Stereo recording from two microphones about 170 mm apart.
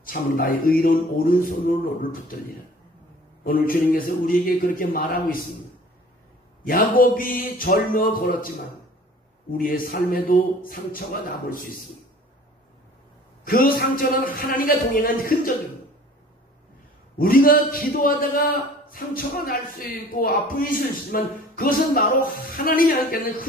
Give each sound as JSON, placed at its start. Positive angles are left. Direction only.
{"t": 0.0, "sound": "a man's voice", "side_deg": 55}
{"t": 3.4, "sound": "a man's voice", "side_deg": 55}
{"t": 6.6, "sound": "a man's voice", "side_deg": 55}
{"t": 9.5, "sound": "a man's voice", "side_deg": 55}
{"t": 13.4, "sound": "a man's voice", "side_deg": 60}
{"t": 17.2, "sound": "a man's voice", "side_deg": 55}